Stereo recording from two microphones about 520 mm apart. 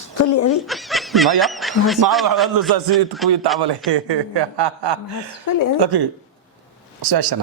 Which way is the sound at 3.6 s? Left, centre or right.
Right.